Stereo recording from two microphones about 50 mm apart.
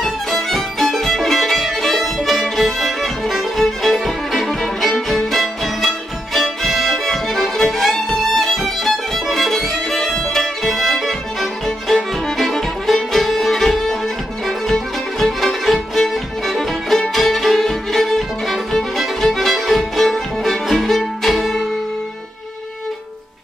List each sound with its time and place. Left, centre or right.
0.0 s music: centre